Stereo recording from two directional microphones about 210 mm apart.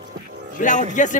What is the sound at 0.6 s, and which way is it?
Speech, 35° left (ahead or behind).